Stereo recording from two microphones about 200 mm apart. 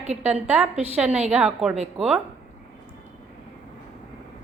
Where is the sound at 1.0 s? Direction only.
5° right (ahead or behind).